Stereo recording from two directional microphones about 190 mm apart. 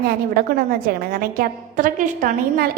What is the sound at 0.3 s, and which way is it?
A woman's voice, 50° right (ahead or behind).